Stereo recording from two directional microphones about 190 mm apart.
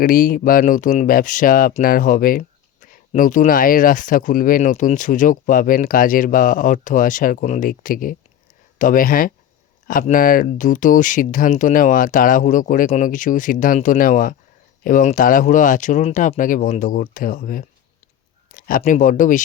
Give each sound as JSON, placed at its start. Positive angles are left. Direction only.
{"t": 0.0, "sound": "speech", "side_deg": 45}
{"t": 18.5, "sound": "a sound", "side_deg": 45}
{"t": 18.8, "sound": "speech", "side_deg": 40}